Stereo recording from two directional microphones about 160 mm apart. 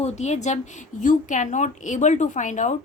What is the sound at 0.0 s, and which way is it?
A woman's voice, 45° left (ahead or behind).